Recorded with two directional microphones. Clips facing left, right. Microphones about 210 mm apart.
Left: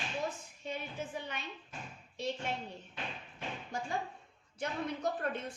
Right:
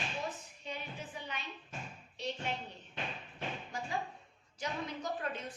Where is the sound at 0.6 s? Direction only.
50° left (ahead or behind).